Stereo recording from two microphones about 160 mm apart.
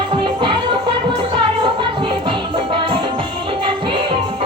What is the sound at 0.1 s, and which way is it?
Music, 30° right (ahead or behind).